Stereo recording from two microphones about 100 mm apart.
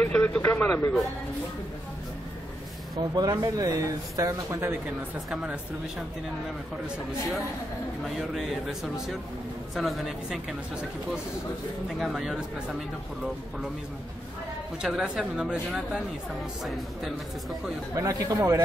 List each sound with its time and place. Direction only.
0.0 s a sound: 15° left (ahead or behind)
3.0 s speech: 40° right (ahead or behind)
5.3 s speech: 10° right (ahead or behind)
8.0 s a man's voice: 5° right (ahead or behind)
12.0 s a man's voice: 5° right (ahead or behind)
14.8 s a man's voice: 5° right (ahead or behind)
17.9 s speech: 35° right (ahead or behind)